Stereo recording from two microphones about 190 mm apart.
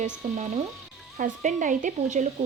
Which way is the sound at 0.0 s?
35° right (ahead or behind).